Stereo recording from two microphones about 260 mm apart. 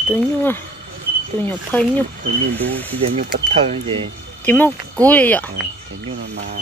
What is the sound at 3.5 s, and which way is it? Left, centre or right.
Speech, right.